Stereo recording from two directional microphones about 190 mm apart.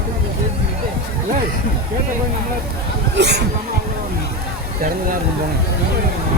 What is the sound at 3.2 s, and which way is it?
Speech, 60° right (ahead or behind).